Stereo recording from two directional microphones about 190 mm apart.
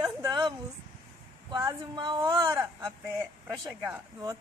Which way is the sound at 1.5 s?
20° right (ahead or behind).